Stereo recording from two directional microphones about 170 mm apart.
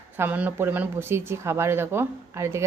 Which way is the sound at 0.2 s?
10° right (ahead or behind).